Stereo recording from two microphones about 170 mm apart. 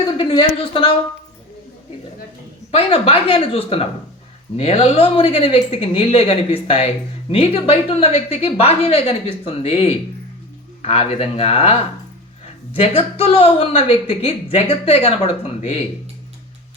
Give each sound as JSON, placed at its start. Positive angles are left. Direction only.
{"t": 0.2, "sound": "speech", "side_deg": 30}
{"t": 2.7, "sound": "speech", "side_deg": 35}